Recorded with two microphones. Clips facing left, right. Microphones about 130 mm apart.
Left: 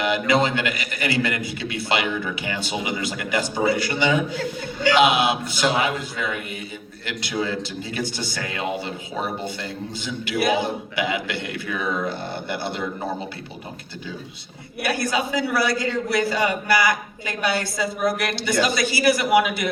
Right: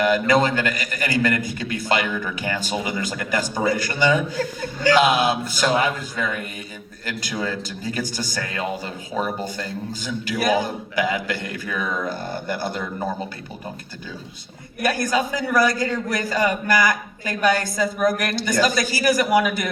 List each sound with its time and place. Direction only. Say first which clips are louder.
0.0 s a man's voice: right 2 dB; 40° right (ahead or behind)
14.8 s a man's voice: right 2 dB; 45° right (ahead or behind)